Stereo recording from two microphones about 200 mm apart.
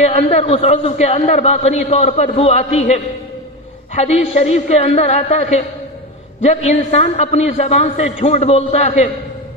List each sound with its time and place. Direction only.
0.0 s a man's voice: 30° left (ahead or behind)